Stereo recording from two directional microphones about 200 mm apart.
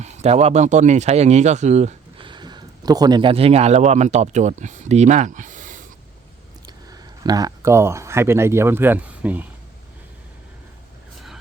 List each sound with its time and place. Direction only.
0.0 s speech: 35° right (ahead or behind)
6.9 s speech: 20° right (ahead or behind)